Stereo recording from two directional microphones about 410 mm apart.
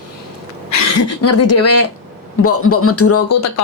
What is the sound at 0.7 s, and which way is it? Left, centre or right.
A woman's voice, left.